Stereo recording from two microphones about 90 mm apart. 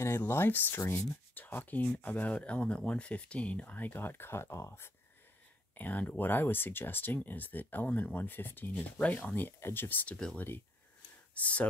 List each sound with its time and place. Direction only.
0.0 s speech: 25° left (ahead or behind)
5.8 s speech: 20° left (ahead or behind)
10.1 s speech: 10° left (ahead or behind)